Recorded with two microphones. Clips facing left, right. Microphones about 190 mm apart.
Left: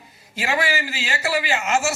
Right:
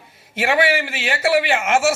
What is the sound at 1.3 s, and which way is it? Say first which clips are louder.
Speech: right 4 dB; 60° right (ahead or behind).